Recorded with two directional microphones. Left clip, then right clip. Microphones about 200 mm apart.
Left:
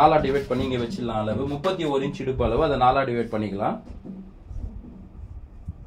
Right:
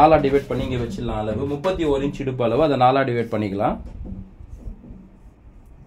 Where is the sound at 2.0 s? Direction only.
60° right (ahead or behind).